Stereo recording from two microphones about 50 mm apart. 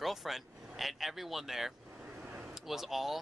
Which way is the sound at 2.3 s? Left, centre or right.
Right.